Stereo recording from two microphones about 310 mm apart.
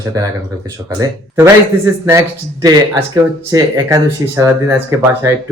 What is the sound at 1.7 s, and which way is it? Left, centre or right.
Speech, centre.